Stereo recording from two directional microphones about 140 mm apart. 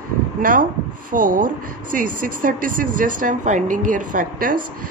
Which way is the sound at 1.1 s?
75° right (ahead or behind).